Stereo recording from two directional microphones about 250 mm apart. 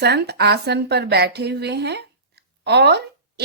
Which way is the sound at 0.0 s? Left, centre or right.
Right.